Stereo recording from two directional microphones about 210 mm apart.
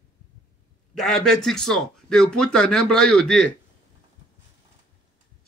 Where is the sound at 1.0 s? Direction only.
Centre (ahead or behind).